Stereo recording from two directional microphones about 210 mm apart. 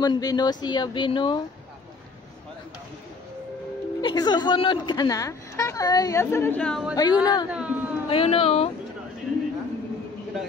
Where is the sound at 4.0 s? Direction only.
20° left (ahead or behind); by 6.9 s centre (ahead or behind).